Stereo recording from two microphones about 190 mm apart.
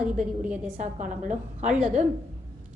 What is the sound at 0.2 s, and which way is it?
Speech, 5° right (ahead or behind).